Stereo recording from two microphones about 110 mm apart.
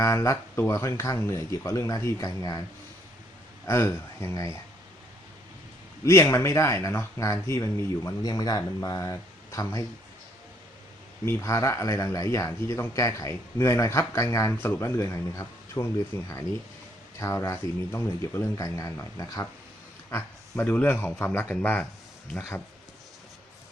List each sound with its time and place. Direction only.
0.0 s speech: 25° left (ahead or behind)
3.7 s speech: 25° left (ahead or behind)
6.1 s speech: 25° left (ahead or behind)
11.3 s speech: 25° left (ahead or behind)
20.1 s a man's voice: 20° left (ahead or behind)